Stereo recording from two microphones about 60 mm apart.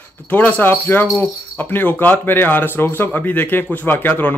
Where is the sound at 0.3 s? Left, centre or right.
Left.